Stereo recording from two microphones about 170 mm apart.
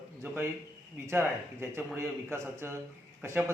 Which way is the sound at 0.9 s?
15° right (ahead or behind).